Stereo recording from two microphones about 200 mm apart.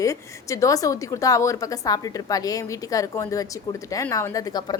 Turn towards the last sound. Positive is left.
turn(degrees=20)  # may be behind; listen again after turning